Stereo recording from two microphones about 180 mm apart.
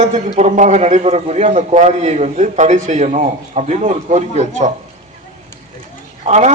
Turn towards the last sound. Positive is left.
turn(degrees=-40)  # may be behind; listen again after turning